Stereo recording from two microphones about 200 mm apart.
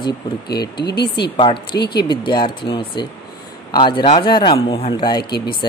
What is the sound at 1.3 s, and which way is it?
Speech, 25° left (ahead or behind).